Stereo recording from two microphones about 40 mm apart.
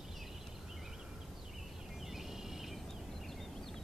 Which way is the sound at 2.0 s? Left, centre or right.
Centre.